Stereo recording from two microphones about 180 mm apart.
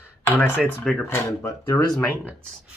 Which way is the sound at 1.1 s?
10° left (ahead or behind).